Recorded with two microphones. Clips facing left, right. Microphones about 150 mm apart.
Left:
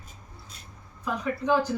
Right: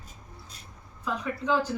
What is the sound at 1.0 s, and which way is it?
Speech, 15° left (ahead or behind).